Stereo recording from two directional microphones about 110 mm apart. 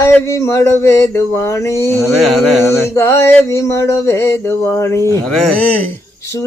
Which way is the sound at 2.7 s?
25° left (ahead or behind).